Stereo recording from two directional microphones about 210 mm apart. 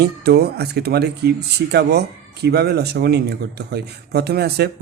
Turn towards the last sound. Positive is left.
turn(degrees=-50)  # may be behind; listen again after turning